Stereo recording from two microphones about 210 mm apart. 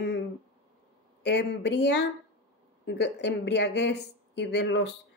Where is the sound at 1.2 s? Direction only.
55° left (ahead or behind).